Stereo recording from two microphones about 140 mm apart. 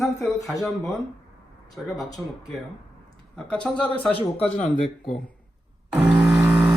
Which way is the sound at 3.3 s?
5° left (ahead or behind).